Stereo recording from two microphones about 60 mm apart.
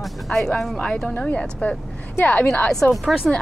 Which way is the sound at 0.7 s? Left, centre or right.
Centre.